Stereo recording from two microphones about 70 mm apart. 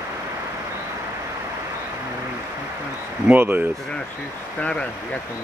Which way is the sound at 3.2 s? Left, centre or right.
Right.